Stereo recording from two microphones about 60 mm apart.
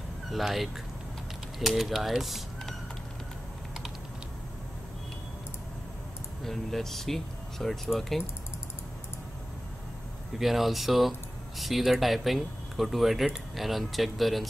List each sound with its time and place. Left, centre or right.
0.3 s speech: centre
6.4 s speech: centre
10.4 s speech: centre